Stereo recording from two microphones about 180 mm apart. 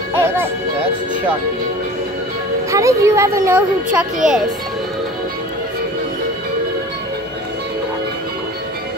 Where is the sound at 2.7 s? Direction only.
15° right (ahead or behind).